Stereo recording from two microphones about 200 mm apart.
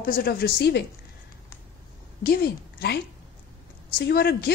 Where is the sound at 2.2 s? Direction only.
50° left (ahead or behind).